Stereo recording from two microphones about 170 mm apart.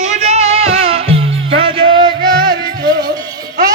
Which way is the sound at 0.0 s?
40° right (ahead or behind).